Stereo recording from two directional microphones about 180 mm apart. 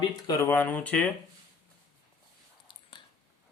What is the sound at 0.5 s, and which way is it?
Speech, 10° left (ahead or behind).